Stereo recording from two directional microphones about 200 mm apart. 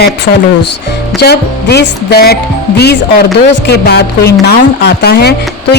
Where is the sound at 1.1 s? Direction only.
55° left (ahead or behind).